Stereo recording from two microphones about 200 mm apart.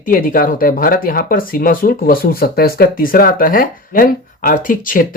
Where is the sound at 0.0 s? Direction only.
45° left (ahead or behind).